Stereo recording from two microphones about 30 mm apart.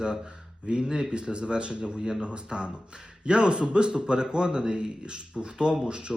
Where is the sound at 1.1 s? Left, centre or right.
Right.